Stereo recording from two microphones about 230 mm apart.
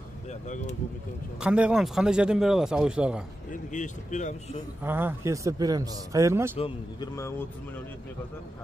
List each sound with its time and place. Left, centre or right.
0.3 s speech: left
1.4 s a man's voice: centre
3.7 s speech: left
4.8 s a man's voice: centre
6.6 s a man's voice: centre